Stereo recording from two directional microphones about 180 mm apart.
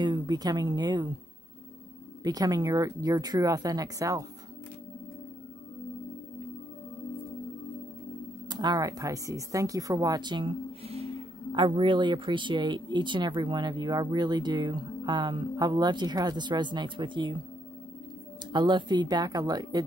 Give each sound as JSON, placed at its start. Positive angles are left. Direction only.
{"t": 0.0, "sound": "speech", "side_deg": -25}
{"t": 2.2, "sound": "speech", "side_deg": -20}
{"t": 8.5, "sound": "speech", "side_deg": -25}
{"t": 18.5, "sound": "speech", "side_deg": -25}